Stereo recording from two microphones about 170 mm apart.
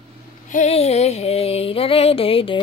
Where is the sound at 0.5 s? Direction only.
40° left (ahead or behind).